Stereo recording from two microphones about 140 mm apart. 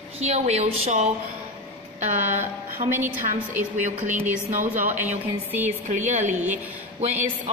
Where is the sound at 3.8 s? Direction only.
60° right (ahead or behind).